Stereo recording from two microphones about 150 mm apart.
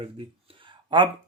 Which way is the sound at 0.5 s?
35° right (ahead or behind).